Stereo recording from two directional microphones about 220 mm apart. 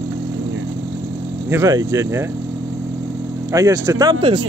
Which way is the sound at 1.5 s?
15° right (ahead or behind).